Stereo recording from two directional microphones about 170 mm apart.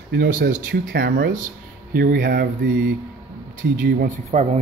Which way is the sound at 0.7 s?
65° right (ahead or behind).